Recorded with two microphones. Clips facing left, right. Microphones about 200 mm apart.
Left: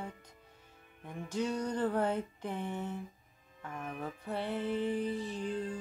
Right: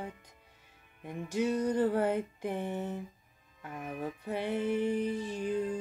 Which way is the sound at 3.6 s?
10° right (ahead or behind).